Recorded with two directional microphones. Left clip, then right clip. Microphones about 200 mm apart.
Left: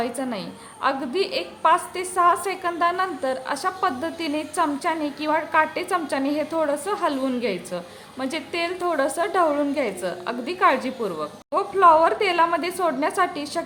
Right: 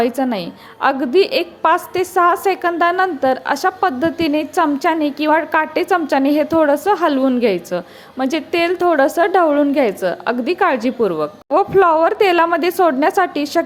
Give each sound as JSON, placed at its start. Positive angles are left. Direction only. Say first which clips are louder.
{"t": 0.0, "sound": "a woman's voice", "louder": "right 9 dB", "side_deg": -35}